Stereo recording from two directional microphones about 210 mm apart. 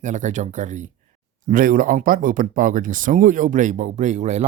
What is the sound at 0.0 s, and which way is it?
Speech, 35° right (ahead or behind).